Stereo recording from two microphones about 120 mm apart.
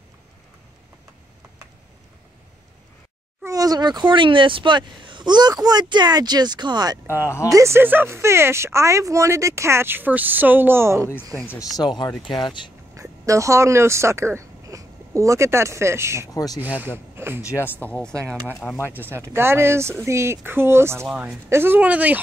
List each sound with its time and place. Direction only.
3.4 s a sound: 30° right (ahead or behind)
4.1 s speech: 45° right (ahead or behind)
7.1 s speech: 20° left (ahead or behind)
7.5 s speech: 20° right (ahead or behind)
11.4 s speech: 5° right (ahead or behind)
11.8 s speech: 40° left (ahead or behind)
12.9 s speech: 25° right (ahead or behind)
16.3 s speech: 30° left (ahead or behind)
16.8 s speech: 20° right (ahead or behind)
17.4 s speech: 20° left (ahead or behind)
19.1 s speech: 20° right (ahead or behind)
21.1 s speech: 5° right (ahead or behind)
21.5 s speech: 20° right (ahead or behind)